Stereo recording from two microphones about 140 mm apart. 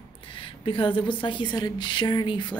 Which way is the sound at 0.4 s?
35° left (ahead or behind).